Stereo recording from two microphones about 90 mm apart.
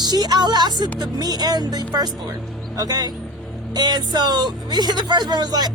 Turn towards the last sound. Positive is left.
turn(degrees=-50)  # may be behind; listen again after turning